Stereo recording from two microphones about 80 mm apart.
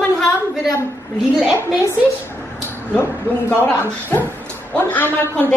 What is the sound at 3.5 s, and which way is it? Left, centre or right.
Speech, centre.